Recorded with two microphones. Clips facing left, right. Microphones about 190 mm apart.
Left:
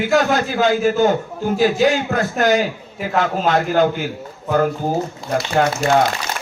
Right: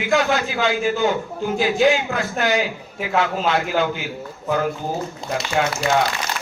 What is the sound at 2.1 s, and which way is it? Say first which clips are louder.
A man's voice: left 4 dB; 45° left (ahead or behind).